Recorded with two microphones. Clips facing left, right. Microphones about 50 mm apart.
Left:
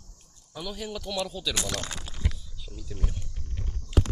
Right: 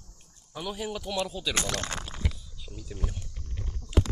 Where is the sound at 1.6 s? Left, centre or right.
Right.